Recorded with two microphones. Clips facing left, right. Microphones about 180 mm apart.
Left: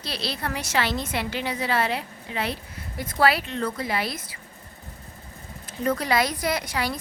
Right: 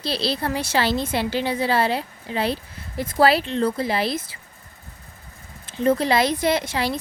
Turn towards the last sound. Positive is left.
turn(degrees=-25)  # may be behind; listen again after turning